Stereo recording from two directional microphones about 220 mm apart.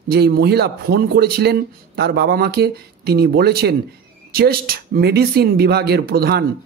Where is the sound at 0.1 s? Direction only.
45° right (ahead or behind).